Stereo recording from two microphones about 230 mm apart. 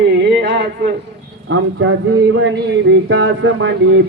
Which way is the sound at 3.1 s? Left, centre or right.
Right.